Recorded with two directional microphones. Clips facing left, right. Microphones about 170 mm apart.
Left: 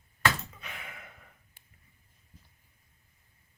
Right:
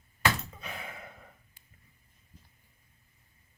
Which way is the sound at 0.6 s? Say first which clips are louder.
Right 4 dB; 35° right (ahead or behind).